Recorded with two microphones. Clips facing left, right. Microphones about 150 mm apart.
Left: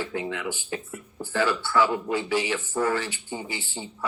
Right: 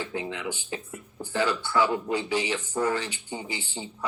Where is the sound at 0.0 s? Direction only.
20° right (ahead or behind).